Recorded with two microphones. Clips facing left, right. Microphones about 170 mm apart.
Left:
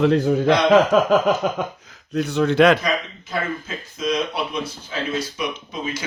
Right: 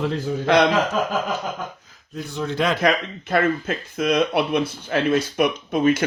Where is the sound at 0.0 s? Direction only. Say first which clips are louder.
Left 7 dB; 70° left (ahead or behind).